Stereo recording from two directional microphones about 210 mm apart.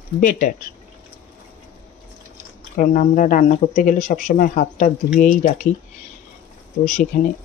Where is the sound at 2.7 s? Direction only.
35° left (ahead or behind).